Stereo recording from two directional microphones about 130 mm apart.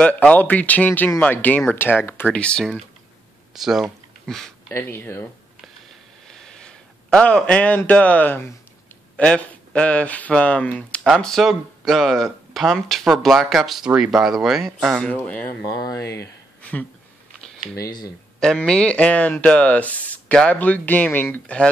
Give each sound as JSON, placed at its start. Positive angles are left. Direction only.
{"t": 0.0, "sound": "speech", "side_deg": 10}
{"t": 3.5, "sound": "a sound", "side_deg": -5}
{"t": 4.7, "sound": "speech", "side_deg": 20}
{"t": 6.2, "sound": "speech", "side_deg": 5}
{"t": 15.8, "sound": "speech", "side_deg": 25}
{"t": 17.7, "sound": "speech", "side_deg": 30}
{"t": 18.4, "sound": "speech", "side_deg": 5}